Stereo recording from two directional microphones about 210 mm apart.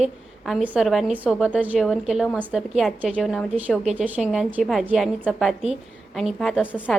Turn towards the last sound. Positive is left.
turn(degrees=-5)  # may be behind; listen again after turning